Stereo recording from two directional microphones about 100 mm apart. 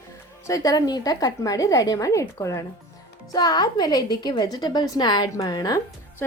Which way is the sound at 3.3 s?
45° left (ahead or behind).